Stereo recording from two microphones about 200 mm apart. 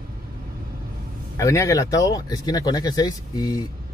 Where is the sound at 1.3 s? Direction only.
15° left (ahead or behind).